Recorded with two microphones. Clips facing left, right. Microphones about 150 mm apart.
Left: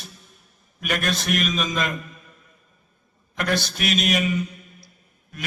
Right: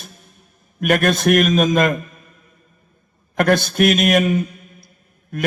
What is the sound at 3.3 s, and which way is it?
A man's voice, 50° right (ahead or behind).